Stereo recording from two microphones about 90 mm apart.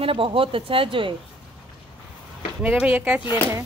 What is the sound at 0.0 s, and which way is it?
Speech, 80° right.